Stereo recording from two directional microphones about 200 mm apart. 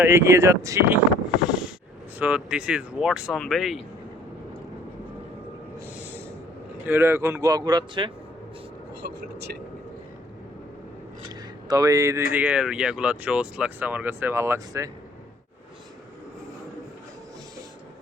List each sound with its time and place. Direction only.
0.0 s speech: 15° right (ahead or behind)
2.1 s speech: 5° right (ahead or behind)
6.0 s snort: 10° right (ahead or behind)
6.8 s speech: 10° right (ahead or behind)
9.0 s speech: 50° right (ahead or behind)
11.3 s a sound: 20° right (ahead or behind)
12.3 s speech: 5° right (ahead or behind)